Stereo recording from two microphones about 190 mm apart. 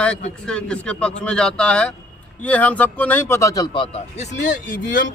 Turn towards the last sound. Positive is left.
turn(degrees=45)  # may be behind; listen again after turning